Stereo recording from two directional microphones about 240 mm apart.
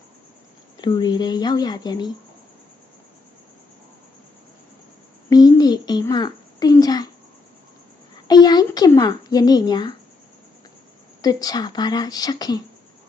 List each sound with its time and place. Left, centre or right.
0.8 s speech: centre
5.3 s a child's voice: centre
8.3 s a sound: centre
11.2 s speech: centre